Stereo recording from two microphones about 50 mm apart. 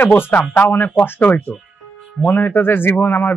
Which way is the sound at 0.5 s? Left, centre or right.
Left.